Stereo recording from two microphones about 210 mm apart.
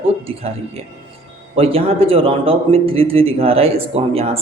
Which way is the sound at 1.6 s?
25° right (ahead or behind).